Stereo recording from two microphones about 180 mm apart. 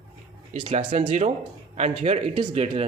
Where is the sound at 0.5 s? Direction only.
30° right (ahead or behind).